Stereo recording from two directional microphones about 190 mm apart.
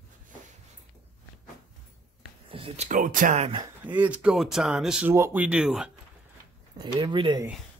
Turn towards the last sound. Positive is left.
turn(degrees=-25)  # may be behind; listen again after turning